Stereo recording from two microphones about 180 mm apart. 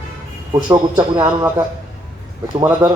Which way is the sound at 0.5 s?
25° right (ahead or behind).